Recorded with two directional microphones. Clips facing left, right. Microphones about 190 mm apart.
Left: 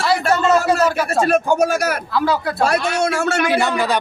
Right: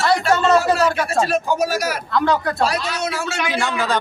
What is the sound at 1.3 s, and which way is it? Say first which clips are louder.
Speech: left 4 dB; 55° left (ahead or behind).